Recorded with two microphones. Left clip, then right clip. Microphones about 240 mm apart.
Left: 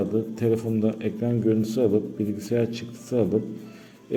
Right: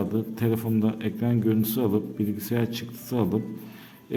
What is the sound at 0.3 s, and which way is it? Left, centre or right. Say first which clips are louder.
A man's voice: left 2 dB; centre.